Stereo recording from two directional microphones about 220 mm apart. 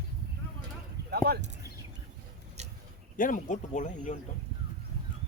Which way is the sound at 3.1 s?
35° left (ahead or behind).